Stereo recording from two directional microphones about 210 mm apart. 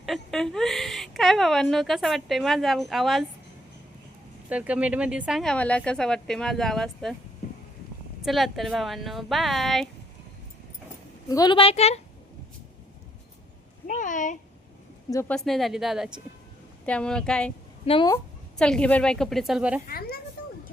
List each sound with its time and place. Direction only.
0.0 s speech: centre (ahead or behind)
4.4 s speech: 5° right (ahead or behind)
8.2 s speech: centre (ahead or behind)
11.3 s a woman's voice: 20° left (ahead or behind)
13.8 s speech: 40° left (ahead or behind)
15.1 s speech: 10° left (ahead or behind)
15.4 s speech: centre (ahead or behind)
17.8 s a woman's voice: 25° left (ahead or behind)
18.5 s speech: 5° left (ahead or behind)
19.9 s a woman's voice: 45° left (ahead or behind)